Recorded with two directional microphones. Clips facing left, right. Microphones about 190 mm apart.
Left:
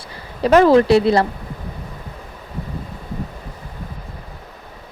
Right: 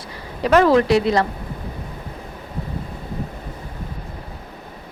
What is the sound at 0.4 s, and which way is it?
Speech, 30° left (ahead or behind).